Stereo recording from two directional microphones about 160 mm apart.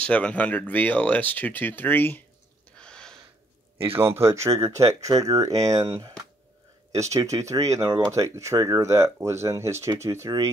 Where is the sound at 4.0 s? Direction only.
15° right (ahead or behind).